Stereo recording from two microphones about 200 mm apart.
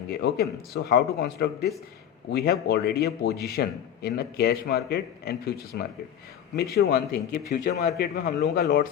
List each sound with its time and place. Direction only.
0.1 s a man's voice: 55° left (ahead or behind)